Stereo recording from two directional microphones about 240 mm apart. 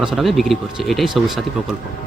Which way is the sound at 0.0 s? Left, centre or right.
Centre.